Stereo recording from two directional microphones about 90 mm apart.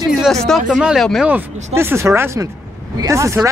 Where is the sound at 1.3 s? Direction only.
25° right (ahead or behind).